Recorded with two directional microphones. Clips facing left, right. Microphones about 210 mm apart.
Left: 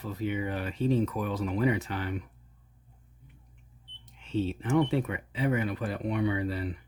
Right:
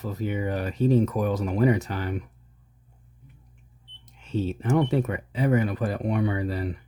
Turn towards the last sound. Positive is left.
turn(degrees=-45)  # may be behind; listen again after turning